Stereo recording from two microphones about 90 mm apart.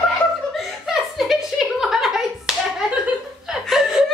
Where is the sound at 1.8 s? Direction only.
5° right (ahead or behind).